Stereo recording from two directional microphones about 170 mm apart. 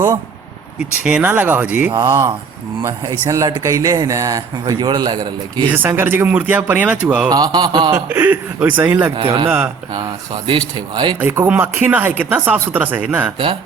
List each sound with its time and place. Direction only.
1.0 s speech: 10° right (ahead or behind)
1.9 s speech: 25° right (ahead or behind)
5.7 s speech: 10° right (ahead or behind)
7.3 s speech: 25° right (ahead or behind)
7.9 s speech: 15° right (ahead or behind)
9.1 s speech: 30° right (ahead or behind)
11.2 s speech: 10° right (ahead or behind)